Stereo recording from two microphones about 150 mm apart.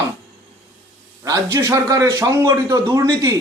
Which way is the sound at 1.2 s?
20° right (ahead or behind).